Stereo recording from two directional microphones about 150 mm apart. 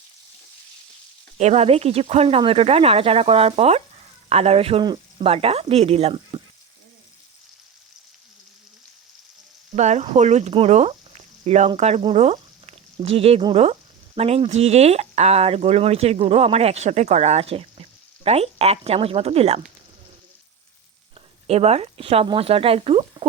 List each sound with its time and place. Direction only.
1.4 s speech: 45° right (ahead or behind)
9.7 s speech: 50° right (ahead or behind)
21.4 s speech: 45° right (ahead or behind)